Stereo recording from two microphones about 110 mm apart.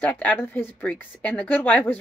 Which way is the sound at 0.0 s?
15° left (ahead or behind).